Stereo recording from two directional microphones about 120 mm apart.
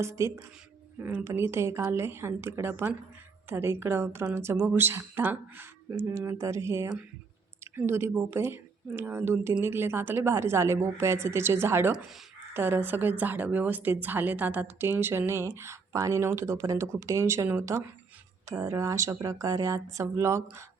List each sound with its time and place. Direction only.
0.0 s a woman's voice: 20° right (ahead or behind)